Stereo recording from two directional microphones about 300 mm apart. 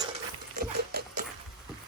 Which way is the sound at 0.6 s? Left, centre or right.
Right.